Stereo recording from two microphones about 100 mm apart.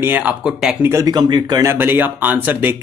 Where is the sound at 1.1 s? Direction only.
45° right (ahead or behind).